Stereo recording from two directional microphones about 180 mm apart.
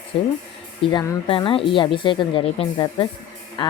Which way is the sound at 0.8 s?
25° left (ahead or behind).